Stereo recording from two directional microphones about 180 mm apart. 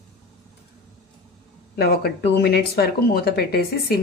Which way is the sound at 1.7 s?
60° left (ahead or behind).